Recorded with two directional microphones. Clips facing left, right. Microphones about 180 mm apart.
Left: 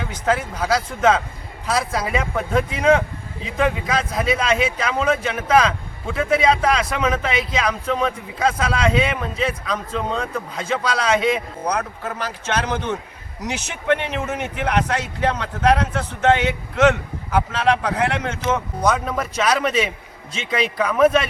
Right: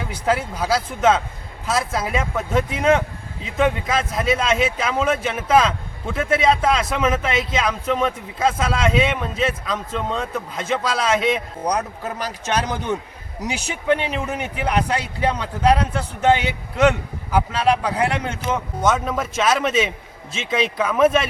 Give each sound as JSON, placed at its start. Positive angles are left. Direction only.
{"t": 0.1, "sound": "speech", "side_deg": -5}
{"t": 11.6, "sound": "speech", "side_deg": -15}
{"t": 14.1, "sound": "speech", "side_deg": -5}